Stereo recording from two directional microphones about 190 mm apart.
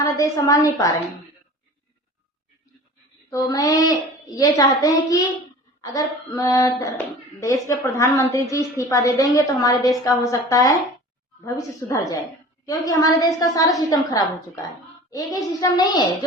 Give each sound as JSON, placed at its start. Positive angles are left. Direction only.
{"t": 0.0, "sound": "a woman's voice", "side_deg": 20}
{"t": 3.2, "sound": "a woman's voice", "side_deg": 20}